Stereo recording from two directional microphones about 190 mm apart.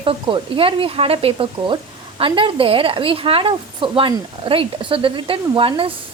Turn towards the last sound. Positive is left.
turn(degrees=-30)  # may be behind; listen again after turning